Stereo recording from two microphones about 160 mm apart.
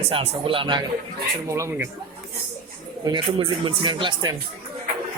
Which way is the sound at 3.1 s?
30° right (ahead or behind).